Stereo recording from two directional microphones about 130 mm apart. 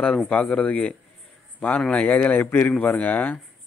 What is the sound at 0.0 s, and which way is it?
Speech, 10° left (ahead or behind).